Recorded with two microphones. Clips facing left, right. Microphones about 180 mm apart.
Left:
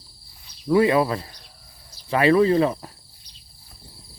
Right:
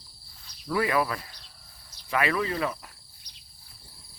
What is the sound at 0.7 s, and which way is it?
Speech, 25° left (ahead or behind).